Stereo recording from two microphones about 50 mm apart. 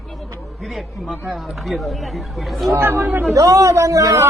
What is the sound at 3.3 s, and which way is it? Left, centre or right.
Speech, right.